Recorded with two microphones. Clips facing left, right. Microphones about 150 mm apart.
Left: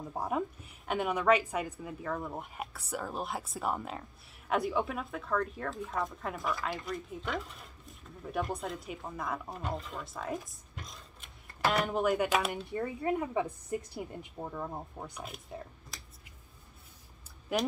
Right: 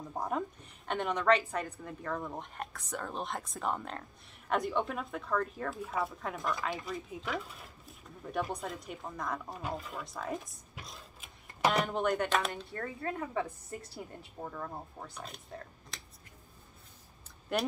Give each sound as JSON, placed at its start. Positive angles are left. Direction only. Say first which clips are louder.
{"t": 0.1, "sound": "speech", "louder": "left 1 dB", "side_deg": 10}
{"t": 12.8, "sound": "speech", "louder": "left 5 dB", "side_deg": 15}
{"t": 17.5, "sound": "speech", "louder": "left 1 dB", "side_deg": 5}